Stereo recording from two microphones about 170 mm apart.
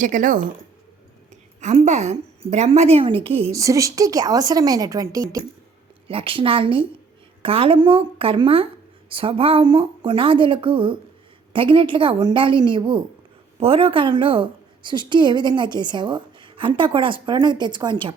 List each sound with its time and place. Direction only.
0.0 s speech: 50° right (ahead or behind)
1.6 s a woman's voice: 45° right (ahead or behind)
3.5 s a woman's voice: 20° right (ahead or behind)
6.1 s a woman's voice: 30° right (ahead or behind)